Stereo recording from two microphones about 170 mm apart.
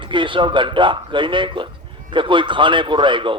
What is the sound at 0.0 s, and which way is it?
Speech, 30° right (ahead or behind).